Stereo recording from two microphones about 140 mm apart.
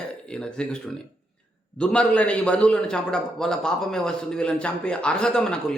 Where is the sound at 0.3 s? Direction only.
5° left (ahead or behind).